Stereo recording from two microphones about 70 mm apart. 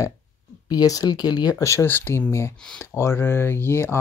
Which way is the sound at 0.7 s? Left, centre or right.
Left.